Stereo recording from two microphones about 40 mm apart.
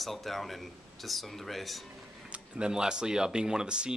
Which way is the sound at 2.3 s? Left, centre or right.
Right.